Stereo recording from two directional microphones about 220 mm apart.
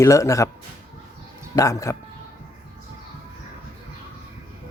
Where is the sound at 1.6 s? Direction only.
15° left (ahead or behind).